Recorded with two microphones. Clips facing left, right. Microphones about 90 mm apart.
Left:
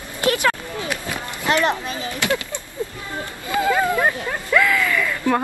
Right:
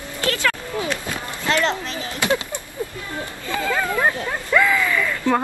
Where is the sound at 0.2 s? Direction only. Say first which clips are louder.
Left 3 dB; 20° left (ahead or behind).